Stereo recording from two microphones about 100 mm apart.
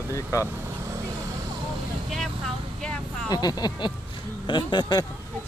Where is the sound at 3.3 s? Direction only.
40° left (ahead or behind).